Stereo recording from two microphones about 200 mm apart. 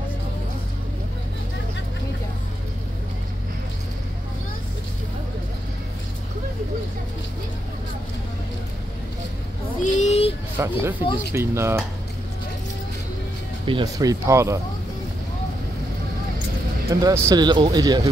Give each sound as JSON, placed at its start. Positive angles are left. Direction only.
{"t": 9.9, "sound": "a sound", "side_deg": 35}
{"t": 10.6, "sound": "speech", "side_deg": -15}
{"t": 13.7, "sound": "speech", "side_deg": -20}
{"t": 16.9, "sound": "speech", "side_deg": -15}